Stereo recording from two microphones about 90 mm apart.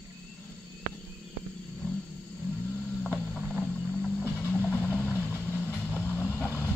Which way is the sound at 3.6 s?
15° left (ahead or behind).